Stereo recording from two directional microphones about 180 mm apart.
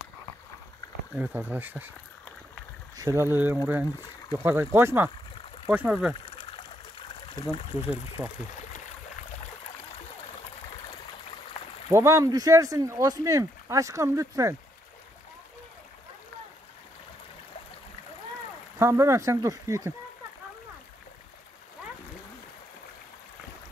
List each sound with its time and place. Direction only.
1.1 s speech: 10° right (ahead or behind)
3.0 s speech: 15° right (ahead or behind)
7.0 s a sound: 30° left (ahead or behind)
8.2 s speech: 15° right (ahead or behind)
11.9 s speech: 15° right (ahead or behind)
18.8 s speech: 15° right (ahead or behind)